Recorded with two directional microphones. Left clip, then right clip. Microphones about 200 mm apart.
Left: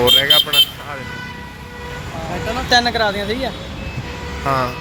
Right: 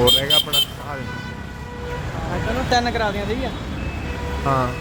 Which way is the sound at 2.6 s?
40° left (ahead or behind).